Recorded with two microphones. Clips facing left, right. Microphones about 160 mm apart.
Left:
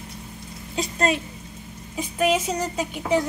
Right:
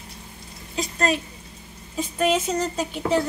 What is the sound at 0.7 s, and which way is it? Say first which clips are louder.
Speech: left 1 dB; 25° left (ahead or behind).